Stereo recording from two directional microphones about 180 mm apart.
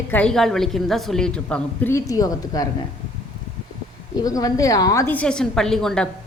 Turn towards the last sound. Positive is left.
turn(degrees=5)  # may be behind; listen again after turning